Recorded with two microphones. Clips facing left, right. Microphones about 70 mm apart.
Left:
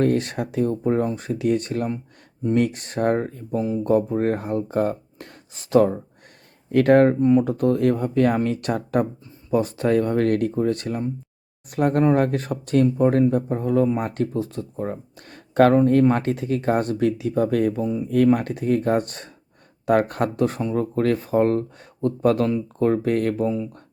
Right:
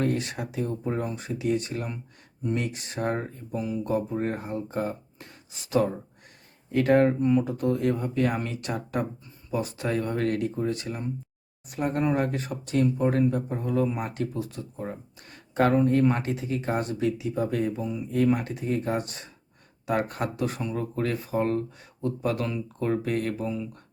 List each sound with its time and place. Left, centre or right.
0.0 s speech: left
6.7 s speech: left
7.2 s speech: left
7.4 s speech: left
15.3 s a sound: left
16.1 s speech: left
22.4 s speech: left